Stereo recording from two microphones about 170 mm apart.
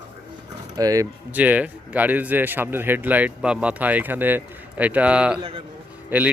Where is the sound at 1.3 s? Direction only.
10° right (ahead or behind).